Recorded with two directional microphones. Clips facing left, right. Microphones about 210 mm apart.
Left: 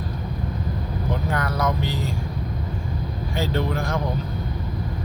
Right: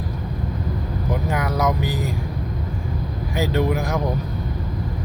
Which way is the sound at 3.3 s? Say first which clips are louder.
Right 4 dB; 15° right (ahead or behind).